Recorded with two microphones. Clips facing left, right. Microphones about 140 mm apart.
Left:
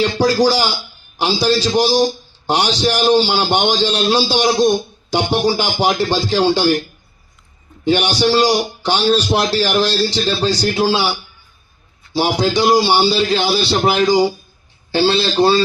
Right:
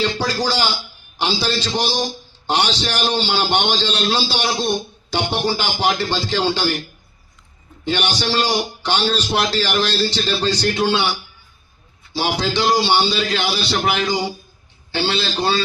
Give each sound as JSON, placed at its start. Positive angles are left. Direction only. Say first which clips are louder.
{"t": 0.0, "sound": "a man's voice", "louder": "left 7 dB", "side_deg": 10}
{"t": 7.9, "sound": "a man's voice", "louder": "left 7 dB", "side_deg": 10}
{"t": 12.1, "sound": "a man's voice", "louder": "left 5 dB", "side_deg": 10}
{"t": 13.0, "sound": "speech", "louder": "left 5 dB", "side_deg": 35}